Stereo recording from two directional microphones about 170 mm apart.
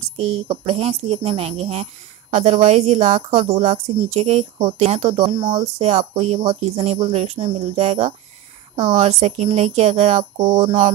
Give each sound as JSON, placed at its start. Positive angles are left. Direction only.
{"t": 0.2, "sound": "speech", "side_deg": -35}